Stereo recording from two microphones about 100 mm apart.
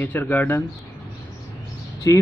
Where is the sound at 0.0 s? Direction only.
20° left (ahead or behind).